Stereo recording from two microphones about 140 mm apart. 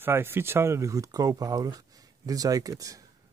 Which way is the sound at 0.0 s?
15° right (ahead or behind).